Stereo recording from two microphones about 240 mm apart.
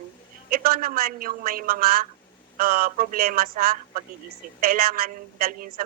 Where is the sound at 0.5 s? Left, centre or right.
Right.